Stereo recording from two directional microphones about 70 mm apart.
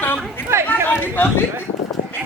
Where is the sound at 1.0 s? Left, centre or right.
Left.